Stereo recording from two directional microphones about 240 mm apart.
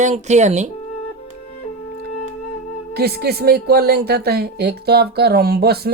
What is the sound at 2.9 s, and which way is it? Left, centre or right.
Speech, right.